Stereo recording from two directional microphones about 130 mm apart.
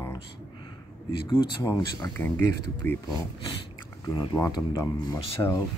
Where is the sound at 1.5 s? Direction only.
30° left (ahead or behind).